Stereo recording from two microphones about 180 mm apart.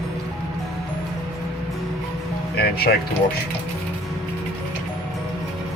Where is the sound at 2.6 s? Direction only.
60° left (ahead or behind).